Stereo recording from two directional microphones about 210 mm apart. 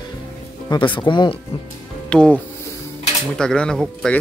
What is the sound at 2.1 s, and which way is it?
Speech, 5° left (ahead or behind).